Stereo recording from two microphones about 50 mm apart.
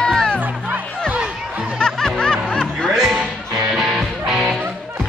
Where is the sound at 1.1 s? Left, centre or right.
Right.